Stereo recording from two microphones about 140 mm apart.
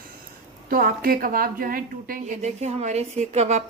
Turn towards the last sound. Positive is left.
turn(degrees=-50)  # may be behind; listen again after turning